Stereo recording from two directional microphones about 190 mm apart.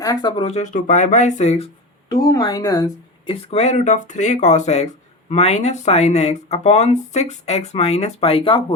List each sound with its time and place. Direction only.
0.0 s speech: 20° left (ahead or behind)
0.4 s speech: 35° left (ahead or behind)
2.3 s speech: 20° left (ahead or behind)
3.5 s speech: 35° left (ahead or behind)